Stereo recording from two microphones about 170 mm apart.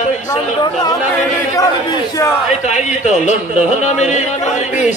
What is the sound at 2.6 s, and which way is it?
A man's voice, 45° left (ahead or behind).